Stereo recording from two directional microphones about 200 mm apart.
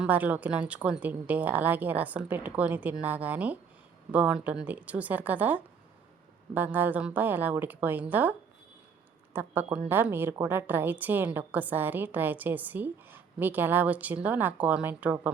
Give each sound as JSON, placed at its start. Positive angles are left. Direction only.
{"t": 0.0, "sound": "a woman's voice", "side_deg": -10}